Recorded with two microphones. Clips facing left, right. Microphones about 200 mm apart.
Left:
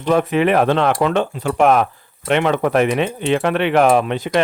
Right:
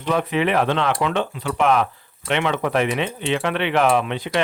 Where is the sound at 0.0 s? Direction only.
45° left (ahead or behind).